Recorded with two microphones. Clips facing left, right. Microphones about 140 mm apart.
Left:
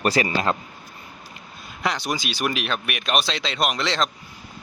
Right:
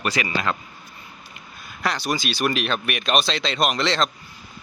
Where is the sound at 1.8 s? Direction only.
15° left (ahead or behind).